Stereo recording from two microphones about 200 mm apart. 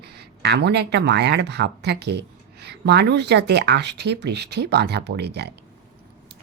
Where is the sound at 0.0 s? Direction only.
55° right (ahead or behind).